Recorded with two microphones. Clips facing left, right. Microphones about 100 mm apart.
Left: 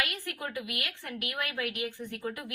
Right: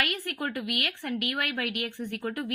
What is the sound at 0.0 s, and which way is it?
A woman's voice, 60° right (ahead or behind).